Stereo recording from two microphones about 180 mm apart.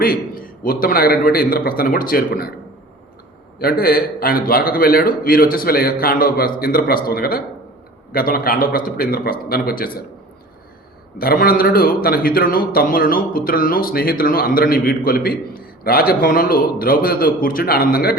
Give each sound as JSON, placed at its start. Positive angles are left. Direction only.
{"t": 0.0, "sound": "a man's voice", "side_deg": 55}
{"t": 3.6, "sound": "a man's voice", "side_deg": 55}
{"t": 11.2, "sound": "a man's voice", "side_deg": 55}